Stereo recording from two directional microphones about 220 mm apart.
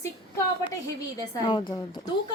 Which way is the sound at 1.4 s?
20° left (ahead or behind).